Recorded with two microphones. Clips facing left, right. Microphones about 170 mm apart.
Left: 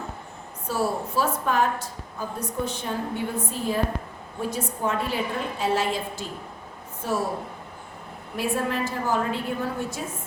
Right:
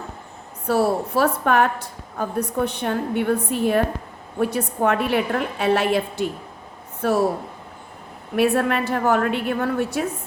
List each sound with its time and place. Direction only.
0.7 s a woman's voice: 65° right (ahead or behind)
8.4 s a woman's voice: 65° right (ahead or behind)